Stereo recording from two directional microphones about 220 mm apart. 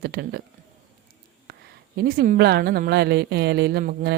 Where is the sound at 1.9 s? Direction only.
45° right (ahead or behind).